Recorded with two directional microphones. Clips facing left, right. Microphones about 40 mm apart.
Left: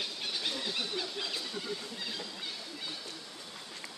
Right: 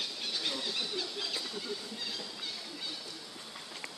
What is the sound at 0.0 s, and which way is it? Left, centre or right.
Squeal, centre.